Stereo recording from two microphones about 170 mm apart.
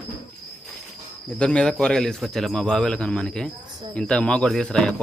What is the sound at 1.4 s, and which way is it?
Speech, 5° left (ahead or behind).